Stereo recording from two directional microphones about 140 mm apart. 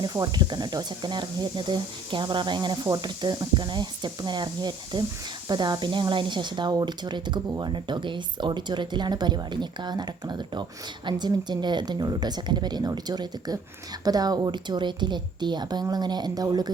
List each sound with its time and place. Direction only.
0.0 s speech: 30° right (ahead or behind)